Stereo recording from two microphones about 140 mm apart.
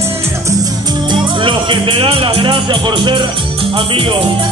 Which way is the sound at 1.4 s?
35° right (ahead or behind).